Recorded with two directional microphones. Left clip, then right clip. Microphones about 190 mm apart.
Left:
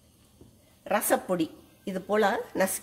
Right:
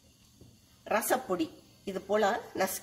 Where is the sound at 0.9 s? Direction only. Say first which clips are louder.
Left 3 dB; 45° left (ahead or behind).